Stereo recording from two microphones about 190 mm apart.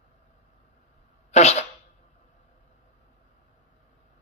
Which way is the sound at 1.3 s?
35° left (ahead or behind).